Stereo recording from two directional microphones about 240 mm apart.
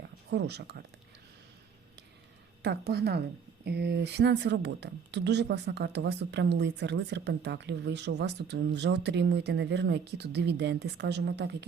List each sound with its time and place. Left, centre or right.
0.3 s speech: right
2.6 s speech: right